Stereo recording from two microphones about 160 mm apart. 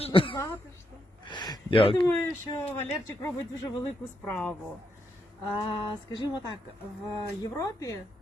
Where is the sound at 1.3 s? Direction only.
25° left (ahead or behind).